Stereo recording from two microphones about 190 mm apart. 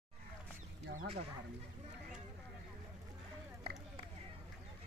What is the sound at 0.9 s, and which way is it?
Speech, 35° right (ahead or behind).